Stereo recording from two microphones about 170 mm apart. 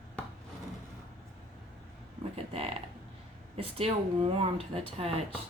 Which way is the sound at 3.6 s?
35° right (ahead or behind).